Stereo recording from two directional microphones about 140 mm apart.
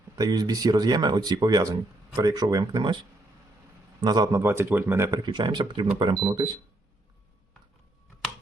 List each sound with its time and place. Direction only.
0.2 s speech: 30° right (ahead or behind)
4.0 s speech: 30° right (ahead or behind)
4.4 s speech: 20° right (ahead or behind)
5.2 s speech: 30° right (ahead or behind)